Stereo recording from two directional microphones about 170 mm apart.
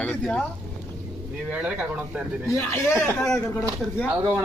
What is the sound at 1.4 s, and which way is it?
Speech, 5° right (ahead or behind).